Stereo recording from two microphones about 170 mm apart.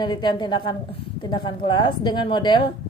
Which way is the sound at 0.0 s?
25° left (ahead or behind).